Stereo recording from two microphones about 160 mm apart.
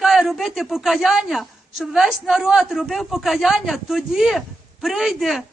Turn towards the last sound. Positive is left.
turn(degrees=0)  # may be behind; listen again after turning